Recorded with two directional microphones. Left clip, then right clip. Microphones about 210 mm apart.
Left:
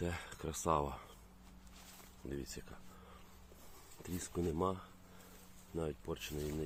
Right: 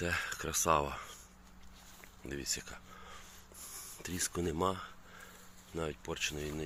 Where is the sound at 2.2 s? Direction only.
5° left (ahead or behind).